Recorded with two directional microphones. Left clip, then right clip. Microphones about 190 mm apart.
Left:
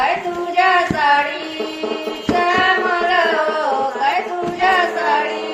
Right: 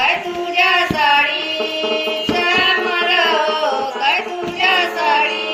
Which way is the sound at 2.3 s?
45° left (ahead or behind).